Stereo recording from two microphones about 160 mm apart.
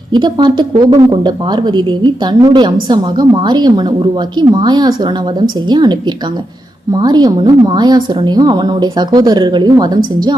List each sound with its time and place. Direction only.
0.1 s a woman's voice: 25° right (ahead or behind)